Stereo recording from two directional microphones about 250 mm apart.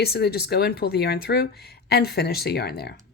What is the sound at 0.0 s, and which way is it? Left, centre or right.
Speech, left.